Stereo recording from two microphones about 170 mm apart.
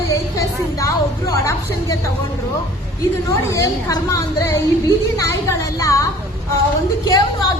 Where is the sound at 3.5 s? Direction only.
20° left (ahead or behind).